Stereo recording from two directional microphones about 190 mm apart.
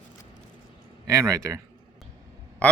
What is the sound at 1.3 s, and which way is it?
Speech, 15° right (ahead or behind).